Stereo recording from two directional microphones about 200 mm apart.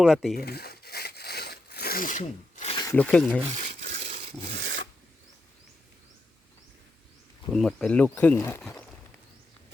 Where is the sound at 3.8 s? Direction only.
60° right (ahead or behind).